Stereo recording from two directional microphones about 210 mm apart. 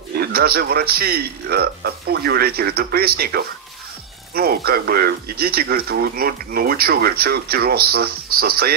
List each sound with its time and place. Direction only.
0.2 s a man's voice: 45° right (ahead or behind)